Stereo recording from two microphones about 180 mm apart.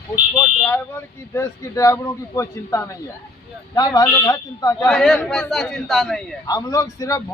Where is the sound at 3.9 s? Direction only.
20° left (ahead or behind).